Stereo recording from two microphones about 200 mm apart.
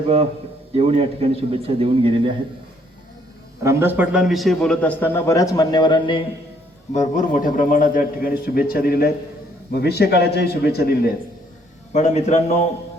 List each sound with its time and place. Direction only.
0.8 s a man's voice: 30° right (ahead or behind)
3.6 s a man's voice: 15° right (ahead or behind); by 6.2 s 25° left (ahead or behind)
6.9 s a man's voice: 40° left (ahead or behind)
11.9 s speech: 35° left (ahead or behind)